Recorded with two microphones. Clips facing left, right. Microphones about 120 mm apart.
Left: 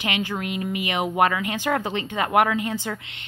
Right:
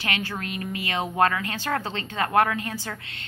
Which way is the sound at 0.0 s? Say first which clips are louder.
Left 3 dB; 15° left (ahead or behind).